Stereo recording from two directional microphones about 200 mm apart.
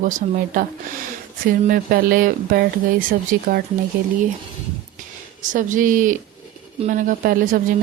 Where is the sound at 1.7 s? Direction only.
45° right (ahead or behind).